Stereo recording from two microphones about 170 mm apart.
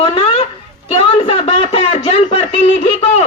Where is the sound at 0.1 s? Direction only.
35° left (ahead or behind).